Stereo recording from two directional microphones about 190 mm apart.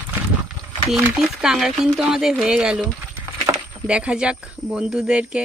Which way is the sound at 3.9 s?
5° right (ahead or behind).